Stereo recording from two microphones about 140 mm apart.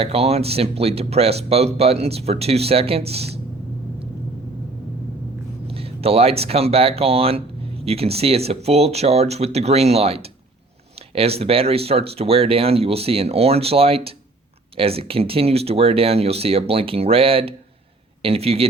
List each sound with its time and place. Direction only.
0.0 s speech: 45° right (ahead or behind)
5.6 s speech: 45° right (ahead or behind)